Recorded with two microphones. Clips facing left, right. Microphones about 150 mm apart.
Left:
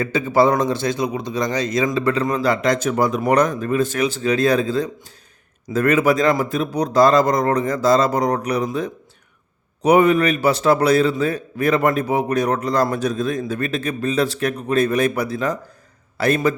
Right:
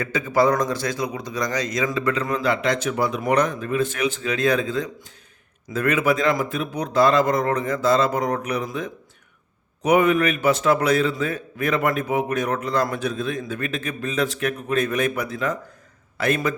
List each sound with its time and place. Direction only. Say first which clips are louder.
0.0 s a man's voice: left 3 dB; 30° left (ahead or behind)